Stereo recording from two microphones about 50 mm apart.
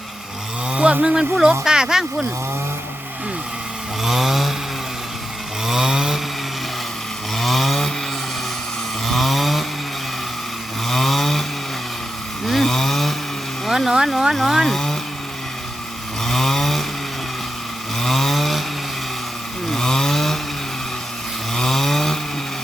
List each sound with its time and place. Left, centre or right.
0.7 s a sound: right
1.0 s speech: centre
4.0 s chainsaw: centre
5.6 s chainsaw: centre
7.3 s chainsaw: centre
9.0 s chainsaw: centre
10.8 s chainsaw: centre
12.5 s chainsaw: centre
13.7 s a sound: centre
13.9 s speech: centre
16.2 s chainsaw: centre
18.0 s chainsaw: centre
19.7 s chainsaw: centre
21.5 s chainsaw: centre